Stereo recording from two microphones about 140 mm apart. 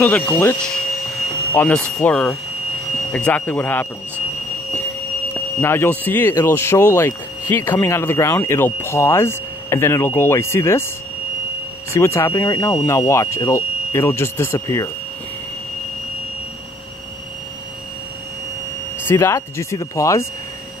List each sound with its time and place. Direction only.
0.0 s speech: 10° left (ahead or behind)
5.3 s speech: 15° left (ahead or behind)
11.9 s speech: 20° left (ahead or behind)
19.0 s speech: 20° left (ahead or behind)